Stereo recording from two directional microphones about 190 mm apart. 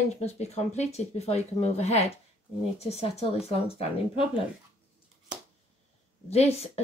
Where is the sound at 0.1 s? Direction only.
35° left (ahead or behind).